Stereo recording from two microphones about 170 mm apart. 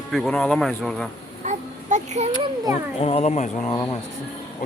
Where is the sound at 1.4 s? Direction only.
45° right (ahead or behind).